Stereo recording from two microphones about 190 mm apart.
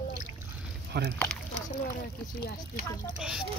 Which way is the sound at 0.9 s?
60° right (ahead or behind).